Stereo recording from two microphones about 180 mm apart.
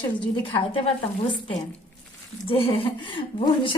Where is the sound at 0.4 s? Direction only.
30° left (ahead or behind).